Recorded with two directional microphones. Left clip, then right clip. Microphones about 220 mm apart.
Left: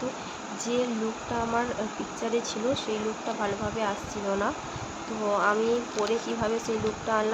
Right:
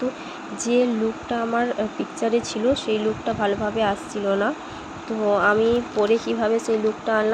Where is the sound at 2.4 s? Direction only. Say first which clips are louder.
Right 6 dB; 15° right (ahead or behind).